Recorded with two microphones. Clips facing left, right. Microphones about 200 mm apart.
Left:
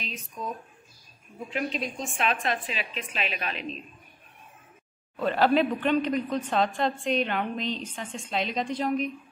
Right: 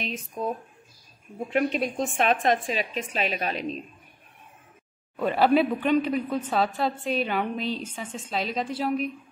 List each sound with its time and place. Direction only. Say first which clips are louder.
0.1 s a woman's voice: right 6 dB; 55° right (ahead or behind)
1.5 s a woman's voice: right 6 dB; 55° right (ahead or behind); by 3.6 s 40° right (ahead or behind)
5.1 s speech: right 2 dB; 10° right (ahead or behind)